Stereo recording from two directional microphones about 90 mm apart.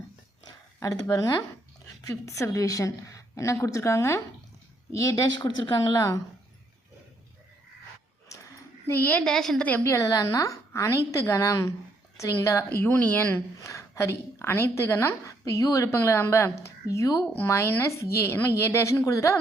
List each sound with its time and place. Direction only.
0.4 s a woman's voice: 40° left (ahead or behind)
5.4 s speech: 55° left (ahead or behind)
5.9 s a woman's voice: 35° left (ahead or behind)
8.9 s a woman's voice: 20° left (ahead or behind)
9.2 s a woman's voice: 5° left (ahead or behind)
9.8 s a woman's voice: 35° left (ahead or behind); by 13.4 s 20° left (ahead or behind)
13.6 s a woman's voice: 35° left (ahead or behind)